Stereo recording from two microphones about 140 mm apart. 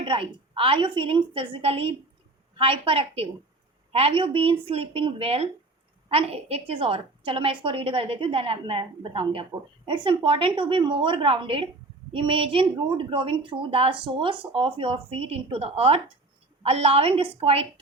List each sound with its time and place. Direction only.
0.0 s a woman's voice: 40° right (ahead or behind)